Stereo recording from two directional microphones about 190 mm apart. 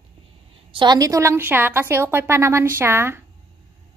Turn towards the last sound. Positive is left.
turn(degrees=-10)  # may be behind; listen again after turning